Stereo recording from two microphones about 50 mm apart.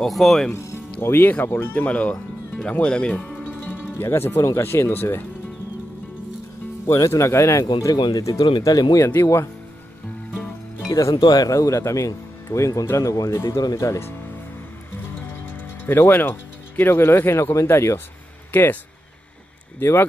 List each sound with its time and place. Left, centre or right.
0.0 s speech: centre
1.0 s speech: left
3.2 s music: left
4.0 s speech: left
4.9 s speech: left
6.9 s speech: left
9.1 s speech: left
11.0 s speech: left
15.4 s speech: left
18.5 s speech: left
19.8 s speech: left